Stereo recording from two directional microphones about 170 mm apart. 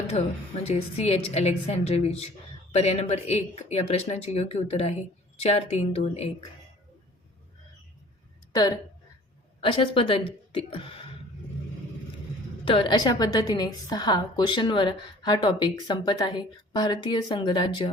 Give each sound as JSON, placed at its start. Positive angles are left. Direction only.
{"t": 0.7, "sound": "speech", "side_deg": 35}
{"t": 8.5, "sound": "a woman's voice", "side_deg": 25}
{"t": 12.6, "sound": "a woman's voice", "side_deg": 30}